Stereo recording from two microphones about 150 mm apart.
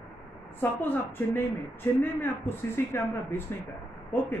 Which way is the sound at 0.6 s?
15° left (ahead or behind).